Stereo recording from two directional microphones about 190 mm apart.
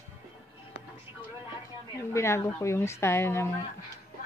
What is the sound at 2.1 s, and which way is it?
A woman's voice, 15° left (ahead or behind).